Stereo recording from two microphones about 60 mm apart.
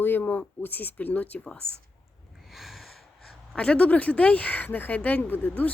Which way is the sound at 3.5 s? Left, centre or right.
Centre.